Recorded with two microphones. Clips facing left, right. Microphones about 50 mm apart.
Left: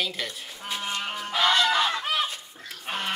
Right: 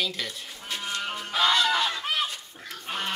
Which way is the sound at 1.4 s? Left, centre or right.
Left.